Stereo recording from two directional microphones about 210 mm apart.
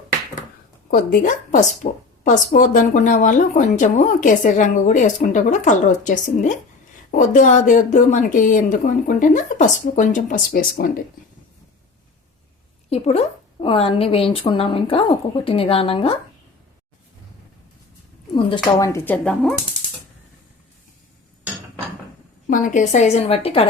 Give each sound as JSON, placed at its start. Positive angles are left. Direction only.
{"t": 0.9, "sound": "a woman's voice", "side_deg": 40}
{"t": 12.9, "sound": "a woman's voice", "side_deg": 30}
{"t": 18.3, "sound": "a woman's voice", "side_deg": 20}
{"t": 22.4, "sound": "a woman's voice", "side_deg": 40}